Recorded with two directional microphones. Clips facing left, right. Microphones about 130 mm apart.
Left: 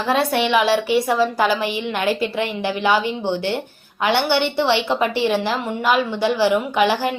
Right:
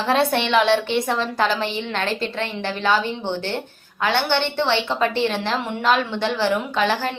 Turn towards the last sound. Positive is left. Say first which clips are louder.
# left 3 dB
turn(degrees=15)  # may be behind; listen again after turning